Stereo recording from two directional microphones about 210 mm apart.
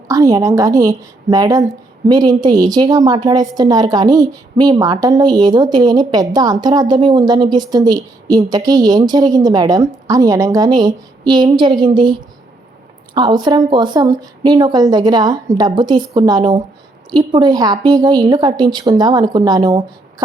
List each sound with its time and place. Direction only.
0.1 s a woman's voice: 15° right (ahead or behind)
13.1 s a woman's voice: 20° right (ahead or behind)